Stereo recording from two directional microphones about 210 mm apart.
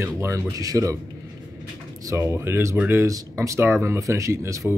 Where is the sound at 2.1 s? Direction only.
10° right (ahead or behind).